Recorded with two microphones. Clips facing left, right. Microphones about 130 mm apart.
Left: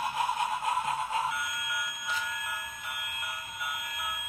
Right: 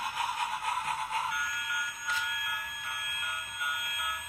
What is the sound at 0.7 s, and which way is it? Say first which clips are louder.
Alarm clock: left 3 dB; 25° left (ahead or behind).